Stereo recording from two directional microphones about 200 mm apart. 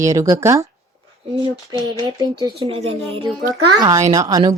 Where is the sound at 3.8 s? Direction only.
15° right (ahead or behind).